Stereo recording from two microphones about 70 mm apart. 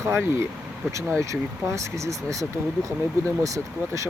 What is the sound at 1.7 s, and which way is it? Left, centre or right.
Speech, right.